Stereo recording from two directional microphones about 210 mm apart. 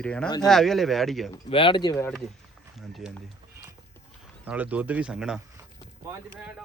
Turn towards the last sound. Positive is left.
turn(degrees=-5)  # may be behind; listen again after turning